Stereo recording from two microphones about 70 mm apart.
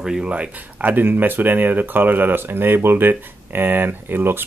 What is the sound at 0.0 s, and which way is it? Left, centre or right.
Speech, centre.